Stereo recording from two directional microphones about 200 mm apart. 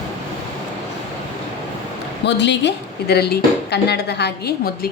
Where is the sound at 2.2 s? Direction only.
60° left (ahead or behind).